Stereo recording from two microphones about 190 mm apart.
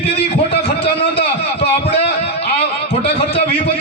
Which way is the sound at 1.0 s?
60° left (ahead or behind).